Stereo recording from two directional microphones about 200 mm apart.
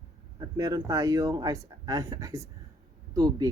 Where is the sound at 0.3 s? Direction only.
15° right (ahead or behind).